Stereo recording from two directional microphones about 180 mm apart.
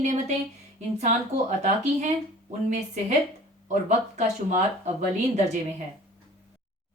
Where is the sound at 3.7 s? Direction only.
40° right (ahead or behind).